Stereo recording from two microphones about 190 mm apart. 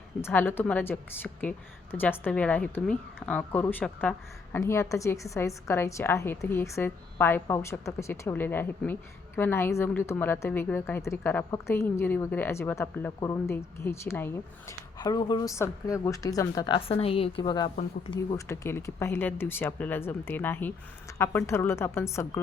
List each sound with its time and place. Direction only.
0.2 s a woman's voice: 10° left (ahead or behind)
18.4 s a woman's voice: 15° left (ahead or behind)